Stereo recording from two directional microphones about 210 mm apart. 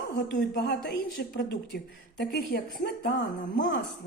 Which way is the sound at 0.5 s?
55° left (ahead or behind).